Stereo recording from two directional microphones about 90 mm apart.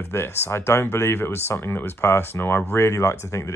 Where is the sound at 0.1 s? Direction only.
25° left (ahead or behind).